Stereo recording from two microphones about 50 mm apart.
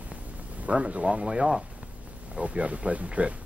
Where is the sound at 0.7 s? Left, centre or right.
Right.